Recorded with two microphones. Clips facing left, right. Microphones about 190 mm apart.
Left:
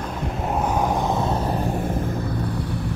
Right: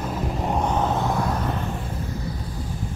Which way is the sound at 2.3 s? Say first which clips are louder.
Left 6 dB; 65° left (ahead or behind).